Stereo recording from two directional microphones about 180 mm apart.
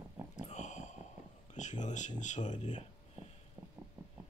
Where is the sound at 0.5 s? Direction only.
40° left (ahead or behind).